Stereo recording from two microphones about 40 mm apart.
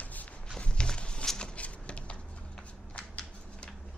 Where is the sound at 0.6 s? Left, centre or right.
Left.